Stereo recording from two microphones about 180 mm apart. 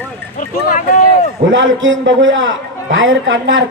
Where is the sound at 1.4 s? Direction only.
90° right.